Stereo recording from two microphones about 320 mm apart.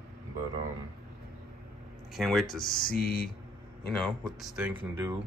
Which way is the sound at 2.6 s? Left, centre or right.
Left.